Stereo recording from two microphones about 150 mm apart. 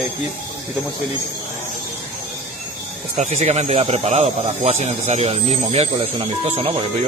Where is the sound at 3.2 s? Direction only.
50° right (ahead or behind).